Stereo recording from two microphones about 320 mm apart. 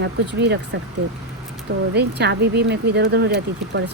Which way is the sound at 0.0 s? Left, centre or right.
Right.